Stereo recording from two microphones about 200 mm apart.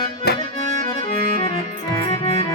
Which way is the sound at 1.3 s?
25° left (ahead or behind).